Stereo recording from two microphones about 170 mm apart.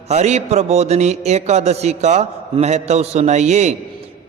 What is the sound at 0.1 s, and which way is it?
A man's voice, 40° right (ahead or behind).